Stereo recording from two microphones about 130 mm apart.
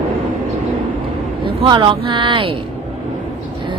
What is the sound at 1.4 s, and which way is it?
Speech, 40° right (ahead or behind).